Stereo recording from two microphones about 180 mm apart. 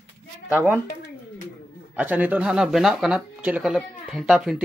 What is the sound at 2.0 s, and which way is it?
Speech, 10° right (ahead or behind).